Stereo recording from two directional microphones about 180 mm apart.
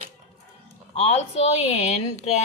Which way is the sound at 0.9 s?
35° left (ahead or behind).